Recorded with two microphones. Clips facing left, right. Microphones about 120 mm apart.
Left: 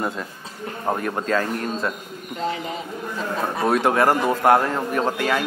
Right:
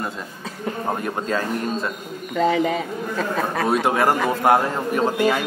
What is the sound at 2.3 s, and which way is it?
A man's voice, 70° right (ahead or behind).